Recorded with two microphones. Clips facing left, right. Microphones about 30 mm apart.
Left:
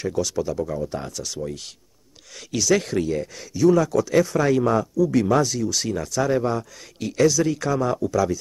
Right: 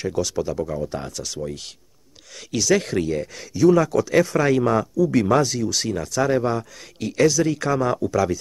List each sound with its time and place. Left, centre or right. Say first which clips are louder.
0.0 s speech: even; centre
5.9 s speech: right 2 dB; centre